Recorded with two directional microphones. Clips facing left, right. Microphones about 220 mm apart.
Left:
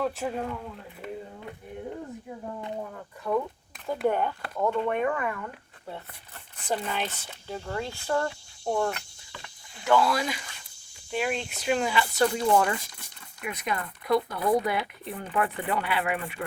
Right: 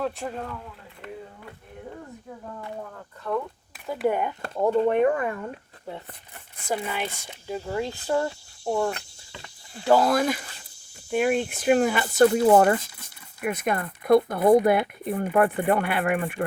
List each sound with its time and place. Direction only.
0.0 s speech: 5° left (ahead or behind)
2.5 s speech: 20° left (ahead or behind)
3.8 s speech: 5° right (ahead or behind)
4.5 s speech: 35° right (ahead or behind)
6.6 s speech: 10° right (ahead or behind)
9.8 s speech: 40° right (ahead or behind)